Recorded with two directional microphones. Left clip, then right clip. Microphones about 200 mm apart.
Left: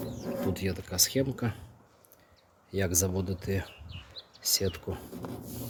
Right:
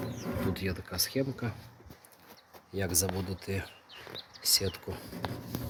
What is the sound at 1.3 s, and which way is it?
Speech, 35° left (ahead or behind).